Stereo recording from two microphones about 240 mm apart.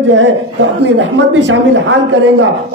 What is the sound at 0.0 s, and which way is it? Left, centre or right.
A man's voice, right.